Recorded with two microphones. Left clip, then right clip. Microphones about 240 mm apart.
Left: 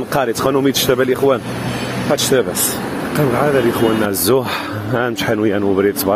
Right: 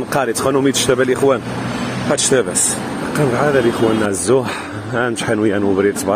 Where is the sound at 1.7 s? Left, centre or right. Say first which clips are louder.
Even; left.